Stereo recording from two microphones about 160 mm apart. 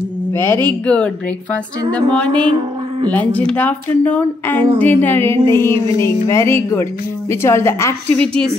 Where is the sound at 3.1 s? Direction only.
10° left (ahead or behind).